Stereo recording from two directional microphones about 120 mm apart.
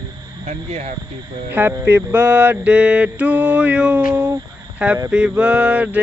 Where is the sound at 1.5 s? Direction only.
15° right (ahead or behind).